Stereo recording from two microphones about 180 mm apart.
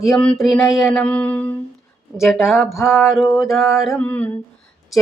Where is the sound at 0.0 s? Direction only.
5° left (ahead or behind).